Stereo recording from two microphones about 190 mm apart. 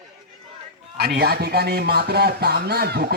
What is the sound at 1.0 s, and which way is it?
Speech, 55° right (ahead or behind).